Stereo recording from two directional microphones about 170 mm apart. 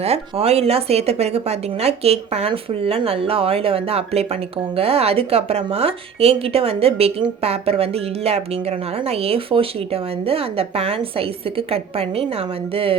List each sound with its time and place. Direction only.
0.0 s speech: 35° right (ahead or behind)